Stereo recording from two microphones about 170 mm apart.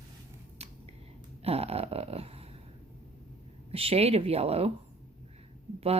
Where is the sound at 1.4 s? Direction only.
35° right (ahead or behind).